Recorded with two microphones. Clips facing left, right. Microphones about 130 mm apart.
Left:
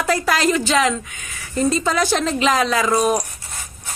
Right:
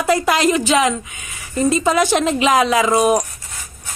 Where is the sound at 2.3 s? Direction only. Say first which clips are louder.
Right 3 dB; 15° right (ahead or behind).